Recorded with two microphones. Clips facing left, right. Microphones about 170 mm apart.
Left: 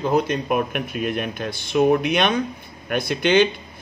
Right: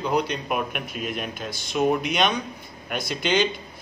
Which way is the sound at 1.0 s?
60° left (ahead or behind).